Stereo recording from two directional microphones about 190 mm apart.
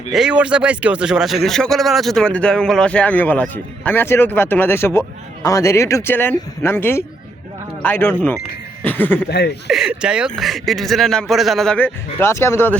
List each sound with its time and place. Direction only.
0.1 s speech: 5° right (ahead or behind)
9.3 s speech: 60° left (ahead or behind)
9.6 s speech: centre (ahead or behind)